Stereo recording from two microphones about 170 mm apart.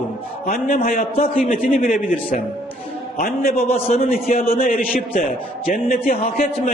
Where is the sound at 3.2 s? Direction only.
60° left (ahead or behind).